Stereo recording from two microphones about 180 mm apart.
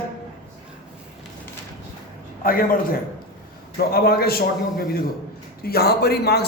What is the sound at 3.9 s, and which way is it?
A man's voice, 60° left (ahead or behind).